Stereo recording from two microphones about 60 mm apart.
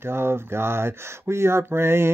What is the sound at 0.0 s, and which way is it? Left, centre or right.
Speech, right.